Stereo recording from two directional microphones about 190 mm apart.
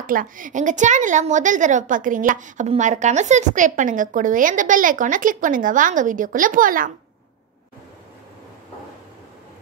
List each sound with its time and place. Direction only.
0.0 s a woman's voice: 45° right (ahead or behind)